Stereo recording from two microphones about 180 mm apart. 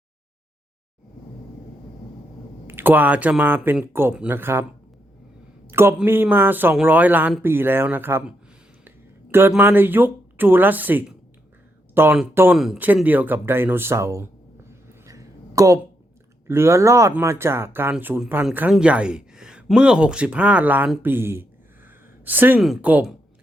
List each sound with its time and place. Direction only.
2.6 s speech: 10° right (ahead or behind)
5.6 s speech: 15° right (ahead or behind)
9.3 s speech: 10° right (ahead or behind)
14.7 s a sound: 15° right (ahead or behind)
16.5 s speech: 15° right (ahead or behind)
21.8 s a sound: 10° right (ahead or behind)
22.6 s speech: 5° right (ahead or behind)